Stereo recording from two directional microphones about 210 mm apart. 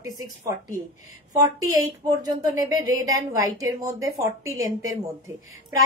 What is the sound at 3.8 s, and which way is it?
A woman's voice, 15° right (ahead or behind).